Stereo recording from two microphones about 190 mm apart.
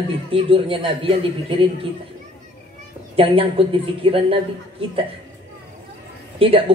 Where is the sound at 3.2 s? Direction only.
30° right (ahead or behind).